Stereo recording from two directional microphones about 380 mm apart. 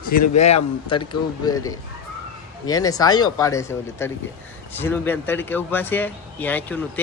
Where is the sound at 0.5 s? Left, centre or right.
Centre.